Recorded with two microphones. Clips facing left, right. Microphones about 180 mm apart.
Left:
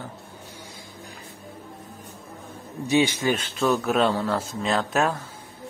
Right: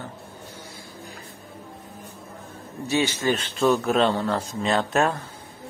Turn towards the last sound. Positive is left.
turn(degrees=0)  # may be behind; listen again after turning